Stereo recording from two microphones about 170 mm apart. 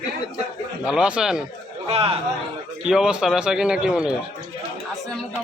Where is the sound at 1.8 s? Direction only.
35° right (ahead or behind).